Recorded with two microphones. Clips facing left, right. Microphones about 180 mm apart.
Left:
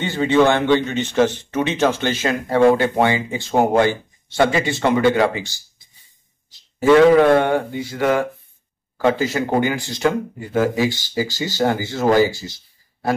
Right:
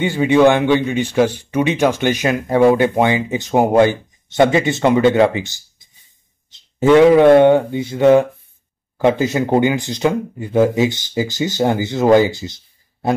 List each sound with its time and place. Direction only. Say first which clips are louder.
0.0 s speech: right 4 dB; 10° right (ahead or behind)